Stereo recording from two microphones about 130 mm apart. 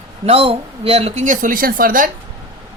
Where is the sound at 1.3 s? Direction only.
90° right.